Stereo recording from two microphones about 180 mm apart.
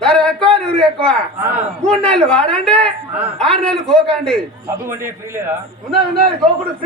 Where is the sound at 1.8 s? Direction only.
5° left (ahead or behind).